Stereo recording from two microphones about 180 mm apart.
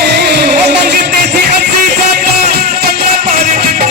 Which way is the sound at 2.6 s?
60° right (ahead or behind).